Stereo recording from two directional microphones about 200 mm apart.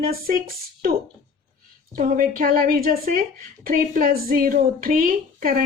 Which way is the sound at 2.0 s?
45° right (ahead or behind).